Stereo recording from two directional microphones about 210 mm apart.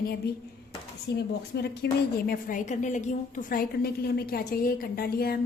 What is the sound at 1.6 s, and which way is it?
A woman's voice, 50° left (ahead or behind).